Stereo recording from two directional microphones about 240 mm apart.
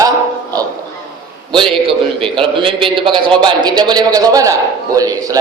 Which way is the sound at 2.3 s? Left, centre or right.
Right.